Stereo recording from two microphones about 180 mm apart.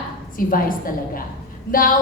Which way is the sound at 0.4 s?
50° left (ahead or behind).